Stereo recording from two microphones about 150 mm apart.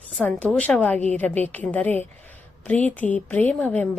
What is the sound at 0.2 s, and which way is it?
A woman's voice, 10° left (ahead or behind).